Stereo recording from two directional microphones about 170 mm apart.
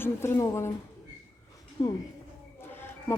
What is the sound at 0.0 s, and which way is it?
Speech, 15° left (ahead or behind).